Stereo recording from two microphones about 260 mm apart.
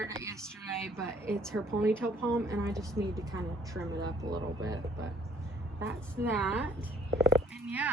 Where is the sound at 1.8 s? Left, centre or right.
Centre.